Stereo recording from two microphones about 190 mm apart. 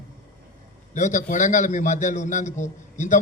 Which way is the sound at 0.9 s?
40° left (ahead or behind).